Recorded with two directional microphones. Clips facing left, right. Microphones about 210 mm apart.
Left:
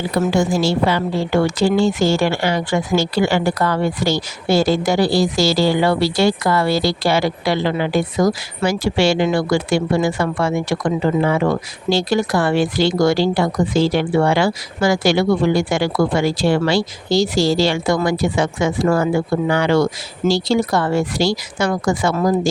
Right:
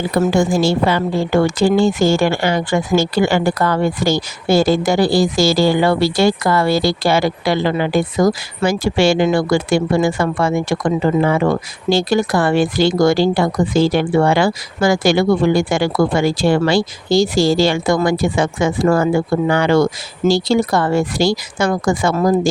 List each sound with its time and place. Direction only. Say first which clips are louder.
0.3 s a woman's voice: right 2 dB; 50° right (ahead or behind)